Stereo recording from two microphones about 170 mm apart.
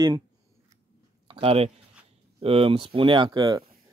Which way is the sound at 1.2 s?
35° right (ahead or behind).